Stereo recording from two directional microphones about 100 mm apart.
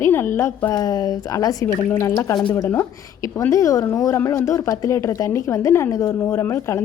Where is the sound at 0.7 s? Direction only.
40° left (ahead or behind).